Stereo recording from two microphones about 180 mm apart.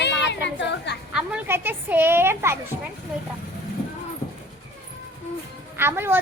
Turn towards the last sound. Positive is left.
turn(degrees=-10)  # may be behind; listen again after turning